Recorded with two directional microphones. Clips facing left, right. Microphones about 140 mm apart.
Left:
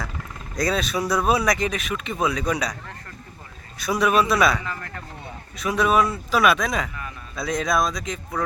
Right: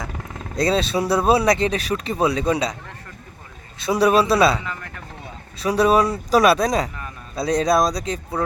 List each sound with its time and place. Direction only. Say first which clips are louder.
0.5 s speech: right 4 dB; 30° right (ahead or behind)
3.8 s speech: right 3 dB; 30° right (ahead or behind)